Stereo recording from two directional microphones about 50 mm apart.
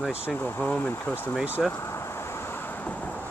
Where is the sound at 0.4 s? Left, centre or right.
Left.